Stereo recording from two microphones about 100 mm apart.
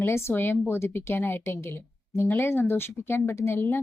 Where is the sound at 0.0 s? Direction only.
25° left (ahead or behind).